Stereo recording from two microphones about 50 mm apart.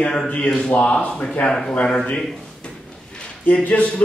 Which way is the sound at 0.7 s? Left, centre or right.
Left.